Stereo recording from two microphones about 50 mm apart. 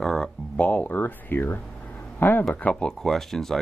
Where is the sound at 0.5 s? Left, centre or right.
Left.